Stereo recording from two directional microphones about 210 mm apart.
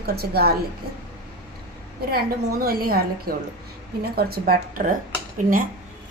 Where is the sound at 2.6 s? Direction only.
45° right (ahead or behind).